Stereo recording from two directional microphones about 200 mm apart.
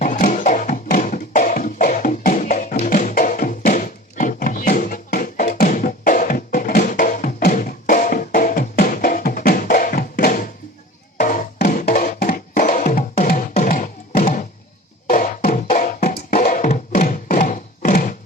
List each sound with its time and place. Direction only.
0.0 s music: 40° left (ahead or behind)